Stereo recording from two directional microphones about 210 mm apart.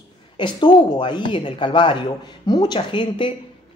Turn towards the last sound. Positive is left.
turn(degrees=25)  # may be behind; listen again after turning